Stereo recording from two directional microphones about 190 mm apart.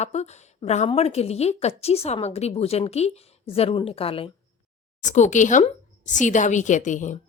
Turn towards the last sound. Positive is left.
turn(degrees=40)  # may be behind; listen again after turning